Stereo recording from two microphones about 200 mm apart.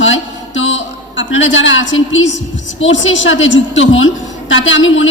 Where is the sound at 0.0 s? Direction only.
70° left (ahead or behind).